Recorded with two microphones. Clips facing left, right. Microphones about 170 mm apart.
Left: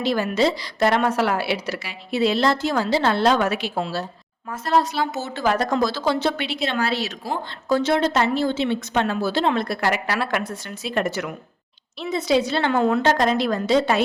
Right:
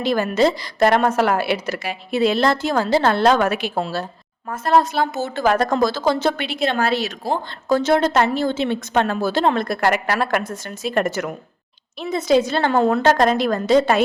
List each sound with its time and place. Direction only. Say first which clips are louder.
0.0 s a woman's voice: right 3 dB; 50° right (ahead or behind)